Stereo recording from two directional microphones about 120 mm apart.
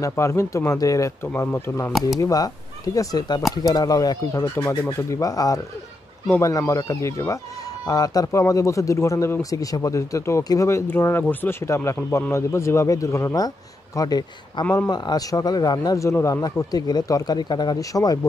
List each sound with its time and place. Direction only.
0.0 s speech: 20° left (ahead or behind)
1.9 s speech: centre (ahead or behind)
2.1 s speech: 30° left (ahead or behind)